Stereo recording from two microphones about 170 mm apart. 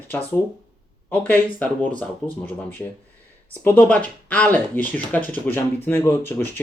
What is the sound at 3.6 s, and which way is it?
Speech, 10° left (ahead or behind).